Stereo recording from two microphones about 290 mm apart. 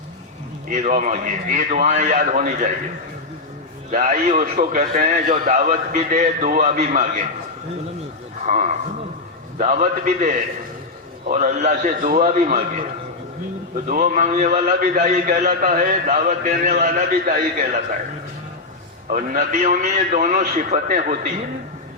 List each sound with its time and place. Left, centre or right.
0.7 s a man's voice: right
3.9 s a man's voice: right
8.4 s a man's voice: right
13.8 s a man's voice: right
19.1 s a man's voice: right